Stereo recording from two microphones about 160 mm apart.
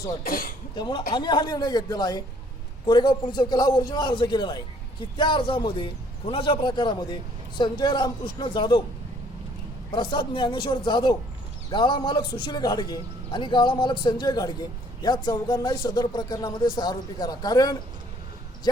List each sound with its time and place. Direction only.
0.3 s speech: 65° left (ahead or behind)
0.8 s a man's voice: 30° left (ahead or behind)
9.9 s a man's voice: 30° left (ahead or behind)